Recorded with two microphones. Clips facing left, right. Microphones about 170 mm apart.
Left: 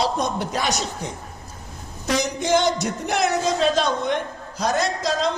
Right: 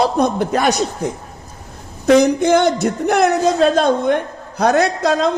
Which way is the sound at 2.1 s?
55° right (ahead or behind).